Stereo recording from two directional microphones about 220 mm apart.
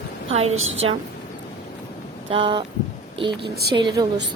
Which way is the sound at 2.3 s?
20° right (ahead or behind).